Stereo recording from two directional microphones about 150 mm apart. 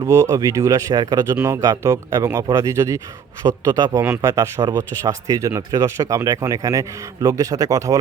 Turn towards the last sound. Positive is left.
turn(degrees=-20)  # may be behind; listen again after turning